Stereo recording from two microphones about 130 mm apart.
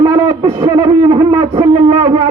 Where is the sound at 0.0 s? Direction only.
30° right (ahead or behind).